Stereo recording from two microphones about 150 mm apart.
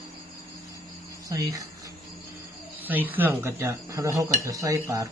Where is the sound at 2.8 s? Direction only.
10° right (ahead or behind).